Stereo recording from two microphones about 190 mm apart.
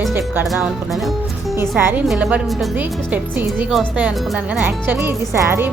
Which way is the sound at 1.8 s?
10° right (ahead or behind).